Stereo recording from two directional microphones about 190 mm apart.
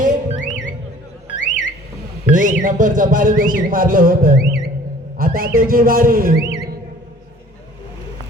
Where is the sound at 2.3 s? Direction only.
45° right (ahead or behind).